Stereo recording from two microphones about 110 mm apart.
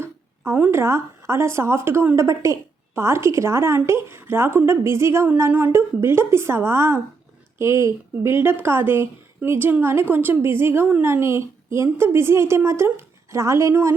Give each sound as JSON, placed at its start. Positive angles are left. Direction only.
{"t": 0.0, "sound": "speech", "side_deg": -20}